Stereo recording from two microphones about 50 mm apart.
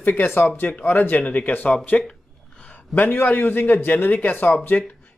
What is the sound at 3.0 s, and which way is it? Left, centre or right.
A man's voice, left.